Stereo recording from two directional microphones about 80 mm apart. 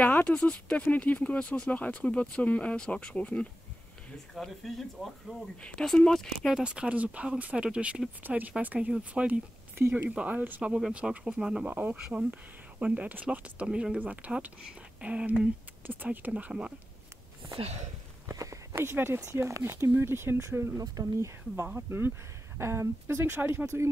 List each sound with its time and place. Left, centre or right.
0.0 s speech: centre
4.4 s speech: centre
6.5 s speech: centre
11.6 s speech: right
18.3 s a sound: right
18.8 s speech: right
20.8 s speech: right